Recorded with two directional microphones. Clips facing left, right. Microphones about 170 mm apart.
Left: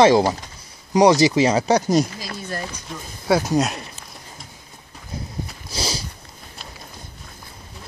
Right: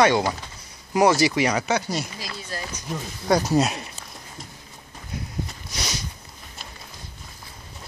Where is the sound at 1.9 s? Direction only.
50° left (ahead or behind).